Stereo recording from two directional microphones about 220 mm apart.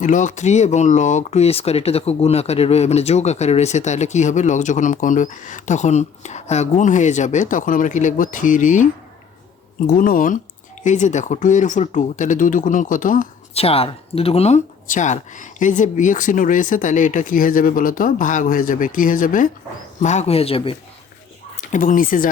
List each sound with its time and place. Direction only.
0.0 s speech: 35° left (ahead or behind)
21.5 s speech: 35° left (ahead or behind)